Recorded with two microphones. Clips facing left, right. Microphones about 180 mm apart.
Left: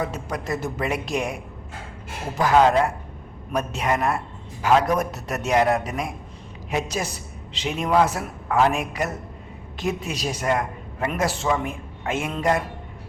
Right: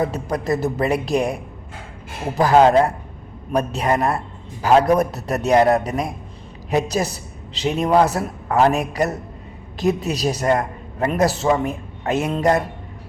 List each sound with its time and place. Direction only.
0.0 s a woman's voice: 35° right (ahead or behind)
2.4 s a woman's voice: 35° right (ahead or behind)